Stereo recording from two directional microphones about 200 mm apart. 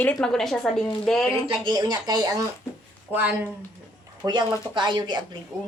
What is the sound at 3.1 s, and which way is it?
Speech, 10° right (ahead or behind).